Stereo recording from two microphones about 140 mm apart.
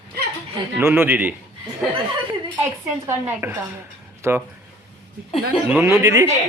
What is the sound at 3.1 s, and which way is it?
Speech, 20° right (ahead or behind).